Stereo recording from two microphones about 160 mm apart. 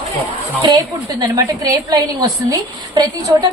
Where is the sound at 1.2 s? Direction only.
20° right (ahead or behind).